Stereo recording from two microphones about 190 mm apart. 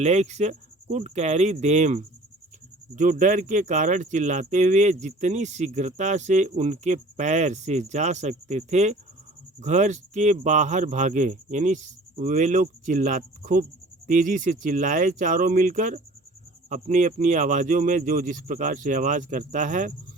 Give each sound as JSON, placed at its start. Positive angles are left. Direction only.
{"t": 0.0, "sound": "speech", "side_deg": -35}